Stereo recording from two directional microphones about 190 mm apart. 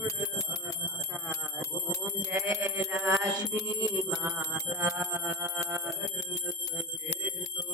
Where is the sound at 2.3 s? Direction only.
15° right (ahead or behind).